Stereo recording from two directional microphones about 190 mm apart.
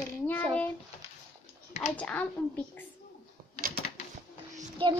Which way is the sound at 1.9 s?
5° left (ahead or behind).